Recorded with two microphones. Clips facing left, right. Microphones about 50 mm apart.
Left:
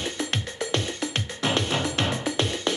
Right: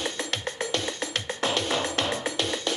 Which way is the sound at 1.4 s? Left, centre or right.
Left.